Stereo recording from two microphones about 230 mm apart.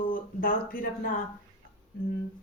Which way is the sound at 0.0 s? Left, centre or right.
Left.